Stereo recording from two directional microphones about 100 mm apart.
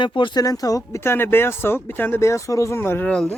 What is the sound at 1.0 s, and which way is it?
Speech, 25° left (ahead or behind).